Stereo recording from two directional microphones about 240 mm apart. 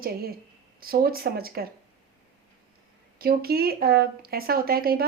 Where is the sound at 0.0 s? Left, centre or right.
Right.